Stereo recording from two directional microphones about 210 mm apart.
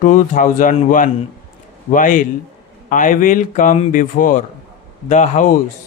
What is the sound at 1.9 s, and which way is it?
Speech, 40° left (ahead or behind).